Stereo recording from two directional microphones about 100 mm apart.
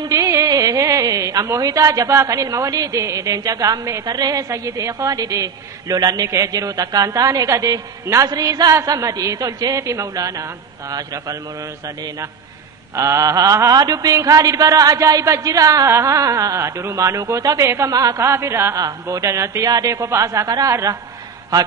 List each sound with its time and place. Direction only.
0.1 s a woman's voice: 30° right (ahead or behind)
12.9 s a woman's voice: 30° right (ahead or behind)
18.8 s a woman's voice: 40° right (ahead or behind)